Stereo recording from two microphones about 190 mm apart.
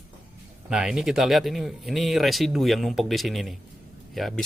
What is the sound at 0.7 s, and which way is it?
Speech, 5° right (ahead or behind).